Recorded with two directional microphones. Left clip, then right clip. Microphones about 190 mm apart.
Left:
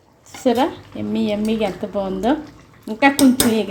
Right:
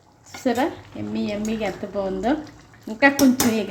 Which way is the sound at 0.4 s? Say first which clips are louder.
Left 5 dB; 15° left (ahead or behind).